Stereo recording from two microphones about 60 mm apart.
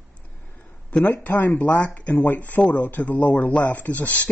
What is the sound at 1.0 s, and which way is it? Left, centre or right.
Speech, left.